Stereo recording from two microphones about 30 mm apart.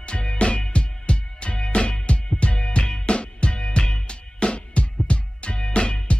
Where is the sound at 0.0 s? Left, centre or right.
Left.